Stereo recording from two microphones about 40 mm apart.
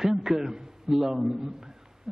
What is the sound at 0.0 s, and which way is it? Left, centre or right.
A man's voice, centre.